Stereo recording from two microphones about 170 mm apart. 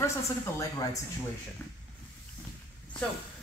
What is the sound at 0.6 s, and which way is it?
Speech, 20° left (ahead or behind).